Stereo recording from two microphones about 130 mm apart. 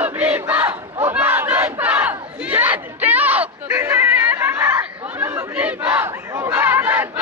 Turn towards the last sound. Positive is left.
turn(degrees=-15)  # may be behind; listen again after turning